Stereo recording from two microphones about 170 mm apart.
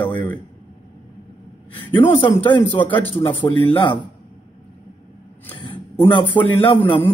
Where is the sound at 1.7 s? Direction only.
30° left (ahead or behind).